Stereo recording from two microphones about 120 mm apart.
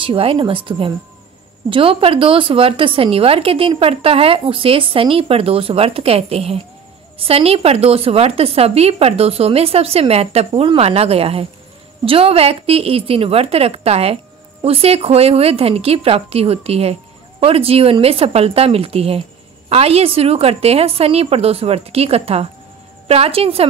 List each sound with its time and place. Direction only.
0.0 s a woman's voice: 50° right (ahead or behind)